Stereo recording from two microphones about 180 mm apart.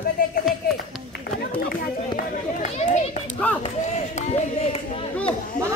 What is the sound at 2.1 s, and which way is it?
Run, 45° left (ahead or behind).